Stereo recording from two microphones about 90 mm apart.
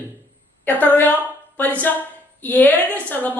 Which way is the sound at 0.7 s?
20° left (ahead or behind).